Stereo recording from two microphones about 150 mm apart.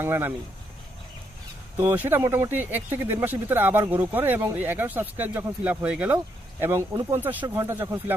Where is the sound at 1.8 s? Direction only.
15° right (ahead or behind).